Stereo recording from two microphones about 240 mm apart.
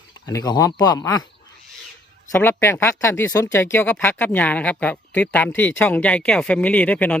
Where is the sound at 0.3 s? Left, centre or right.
Centre.